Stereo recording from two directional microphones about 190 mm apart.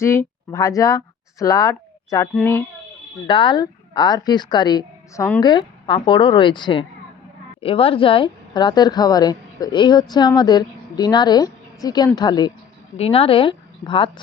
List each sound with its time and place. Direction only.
0.0 s a child's voice: 15° left (ahead or behind)
3.2 s speech: 25° left (ahead or behind)